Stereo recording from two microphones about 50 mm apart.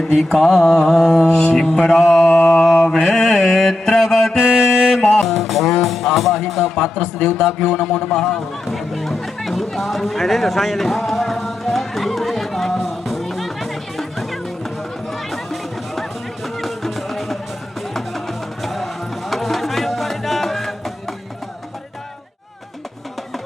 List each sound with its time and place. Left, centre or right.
0.2 s mantra: centre
2.2 s mantra: left
2.9 s mantra: centre
4.9 s music: centre
5.2 s music: centre